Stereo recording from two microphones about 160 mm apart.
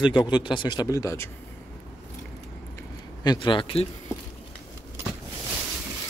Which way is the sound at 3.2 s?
30° left (ahead or behind).